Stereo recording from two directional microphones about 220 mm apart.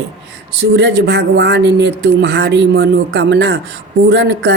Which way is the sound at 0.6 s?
50° right (ahead or behind).